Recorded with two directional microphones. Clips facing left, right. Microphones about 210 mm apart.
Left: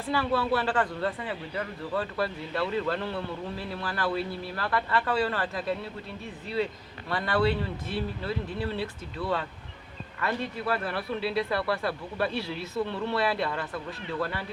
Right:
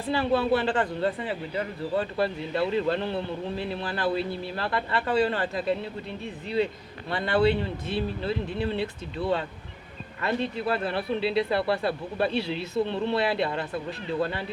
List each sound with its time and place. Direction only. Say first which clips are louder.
0.1 s a man's voice: right 3 dB; 25° right (ahead or behind)
7.1 s a man's voice: right 3 dB; 25° right (ahead or behind)